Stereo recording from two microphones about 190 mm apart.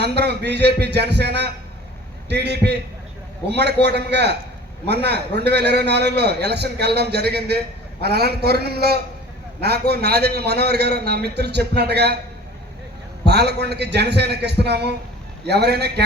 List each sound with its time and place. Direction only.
0.0 s a man's voice: 60° right (ahead or behind)
13.2 s a man's voice: 60° right (ahead or behind)